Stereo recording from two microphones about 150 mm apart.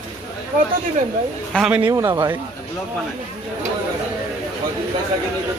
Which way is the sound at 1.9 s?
20° right (ahead or behind).